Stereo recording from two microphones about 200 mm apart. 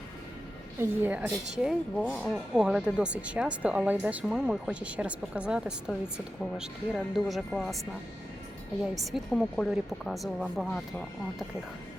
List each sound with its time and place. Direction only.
0.8 s a woman's voice: 10° right (ahead or behind)
9.0 s speech: centre (ahead or behind)